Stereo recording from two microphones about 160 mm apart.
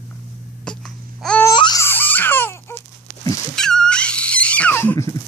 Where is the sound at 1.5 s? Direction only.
30° left (ahead or behind).